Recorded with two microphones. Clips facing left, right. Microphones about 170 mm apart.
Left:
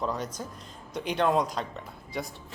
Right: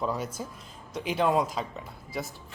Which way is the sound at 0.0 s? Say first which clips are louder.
Right 1 dB; 5° right (ahead or behind).